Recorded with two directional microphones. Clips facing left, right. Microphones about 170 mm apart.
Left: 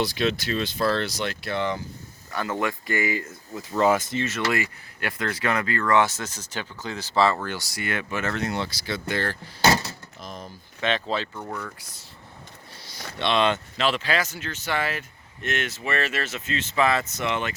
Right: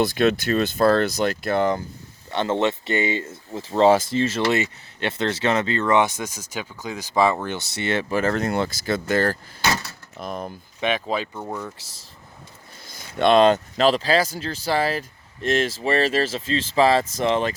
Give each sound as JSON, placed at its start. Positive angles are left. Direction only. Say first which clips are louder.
{"t": 0.0, "sound": "speech", "louder": "right 5 dB", "side_deg": -50}
{"t": 2.3, "sound": "speech", "louder": "right 6 dB", "side_deg": -25}
{"t": 8.4, "sound": "speech", "louder": "right 6 dB", "side_deg": -50}
{"t": 10.2, "sound": "speech", "louder": "right 10 dB", "side_deg": -55}
{"t": 10.8, "sound": "speech", "louder": "right 2 dB", "side_deg": -10}
{"t": 11.8, "sound": "speech", "louder": "even", "side_deg": -90}
{"t": 12.9, "sound": "speech", "louder": "right 8 dB", "side_deg": -50}